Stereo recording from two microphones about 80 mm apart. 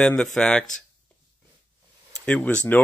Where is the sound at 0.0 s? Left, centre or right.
Centre.